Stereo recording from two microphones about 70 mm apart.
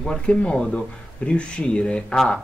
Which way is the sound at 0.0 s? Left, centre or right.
Centre.